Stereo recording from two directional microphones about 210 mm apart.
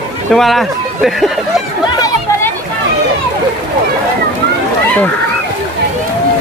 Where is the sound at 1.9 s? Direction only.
15° left (ahead or behind).